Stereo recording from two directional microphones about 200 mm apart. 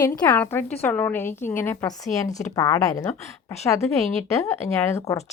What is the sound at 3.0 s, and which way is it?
Speech, 35° left (ahead or behind).